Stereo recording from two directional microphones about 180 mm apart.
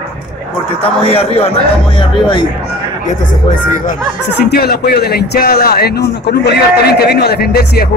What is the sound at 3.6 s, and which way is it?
Speech, 45° left (ahead or behind).